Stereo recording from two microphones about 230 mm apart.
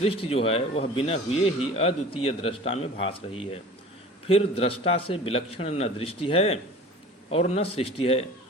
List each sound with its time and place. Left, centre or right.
0.0 s speech: left